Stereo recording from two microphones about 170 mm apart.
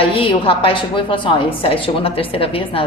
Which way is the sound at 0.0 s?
35° left (ahead or behind).